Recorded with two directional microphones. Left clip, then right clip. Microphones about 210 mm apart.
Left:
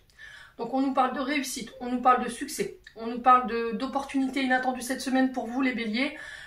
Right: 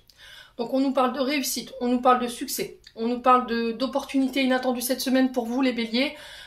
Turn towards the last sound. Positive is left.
turn(degrees=-55)  # may be behind; listen again after turning